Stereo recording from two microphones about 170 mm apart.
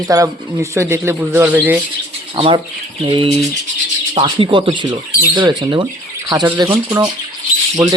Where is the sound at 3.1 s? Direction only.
30° right (ahead or behind).